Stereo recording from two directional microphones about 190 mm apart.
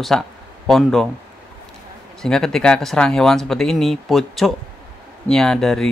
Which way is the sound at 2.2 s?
Centre (ahead or behind).